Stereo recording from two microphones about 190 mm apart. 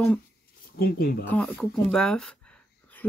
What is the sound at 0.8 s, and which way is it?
Speech, 50° left (ahead or behind).